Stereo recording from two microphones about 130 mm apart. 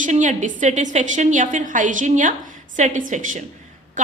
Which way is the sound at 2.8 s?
70° right (ahead or behind).